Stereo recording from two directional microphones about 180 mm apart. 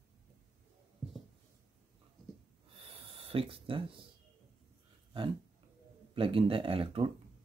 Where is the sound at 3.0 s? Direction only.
30° right (ahead or behind).